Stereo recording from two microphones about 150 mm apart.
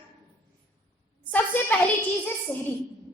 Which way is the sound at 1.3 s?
10° left (ahead or behind).